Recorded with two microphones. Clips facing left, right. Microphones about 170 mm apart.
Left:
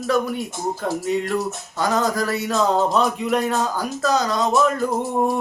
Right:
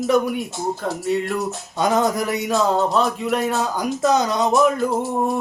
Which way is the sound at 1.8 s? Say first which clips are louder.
Right 2 dB; 20° right (ahead or behind).